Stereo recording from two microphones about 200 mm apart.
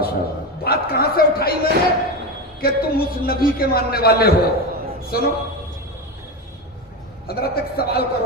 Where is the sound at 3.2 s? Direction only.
45° left (ahead or behind).